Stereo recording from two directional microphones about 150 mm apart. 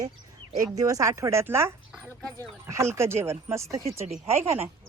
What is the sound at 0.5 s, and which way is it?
Speech, 25° right (ahead or behind).